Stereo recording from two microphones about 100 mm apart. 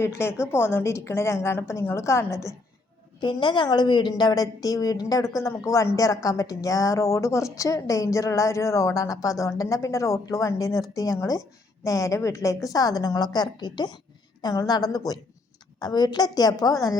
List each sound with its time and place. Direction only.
0.0 s a woman's voice: 25° left (ahead or behind)
3.2 s a woman's voice: 50° left (ahead or behind)
14.4 s a woman's voice: 35° left (ahead or behind)